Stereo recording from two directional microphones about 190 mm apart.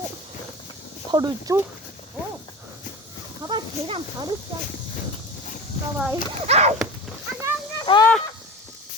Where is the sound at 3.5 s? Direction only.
25° right (ahead or behind).